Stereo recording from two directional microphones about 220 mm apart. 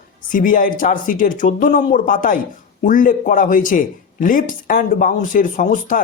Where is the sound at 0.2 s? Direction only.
40° left (ahead or behind).